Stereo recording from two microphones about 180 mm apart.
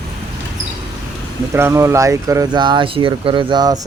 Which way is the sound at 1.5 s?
15° right (ahead or behind).